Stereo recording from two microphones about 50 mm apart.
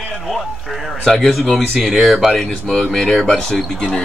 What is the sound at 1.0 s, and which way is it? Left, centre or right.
Speech, centre.